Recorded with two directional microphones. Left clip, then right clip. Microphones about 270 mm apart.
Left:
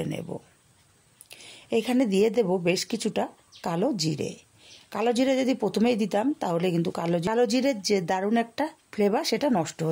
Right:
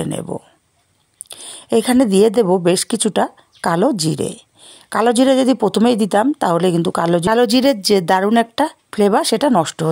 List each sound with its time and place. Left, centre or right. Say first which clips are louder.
0.0 s speech: right 9 dB; right